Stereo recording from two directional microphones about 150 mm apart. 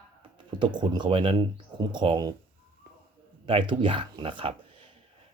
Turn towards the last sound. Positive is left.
turn(degrees=-35)  # may be behind; listen again after turning